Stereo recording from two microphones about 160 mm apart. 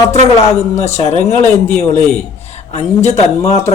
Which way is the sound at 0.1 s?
40° left (ahead or behind).